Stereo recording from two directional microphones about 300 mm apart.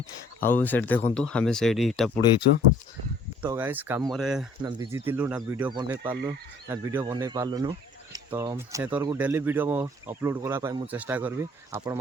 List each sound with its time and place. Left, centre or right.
0.3 s speech: centre
3.4 s speech: centre